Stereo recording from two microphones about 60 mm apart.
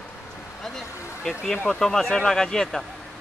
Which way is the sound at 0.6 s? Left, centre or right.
Centre.